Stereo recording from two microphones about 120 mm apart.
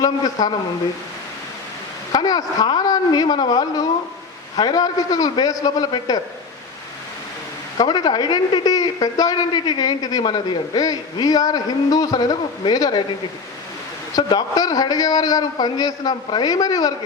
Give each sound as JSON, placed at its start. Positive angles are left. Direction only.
{"t": 0.0, "sound": "a man's voice", "side_deg": 35}
{"t": 2.1, "sound": "a man's voice", "side_deg": 30}
{"t": 7.8, "sound": "a man's voice", "side_deg": 35}
{"t": 14.2, "sound": "a man's voice", "side_deg": 35}